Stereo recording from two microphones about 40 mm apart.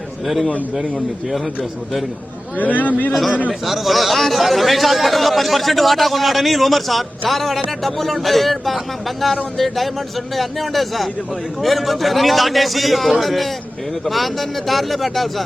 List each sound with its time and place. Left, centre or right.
0.8 s speech: centre
2.6 s a man's voice: left
3.1 s speech: centre